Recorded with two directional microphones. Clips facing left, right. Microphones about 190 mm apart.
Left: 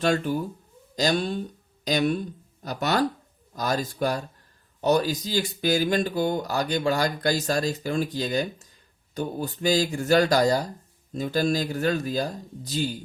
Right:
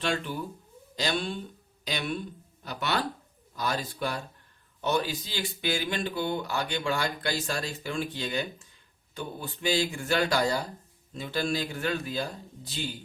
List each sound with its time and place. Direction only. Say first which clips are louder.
0.0 s speech: left 7 dB; 40° left (ahead or behind)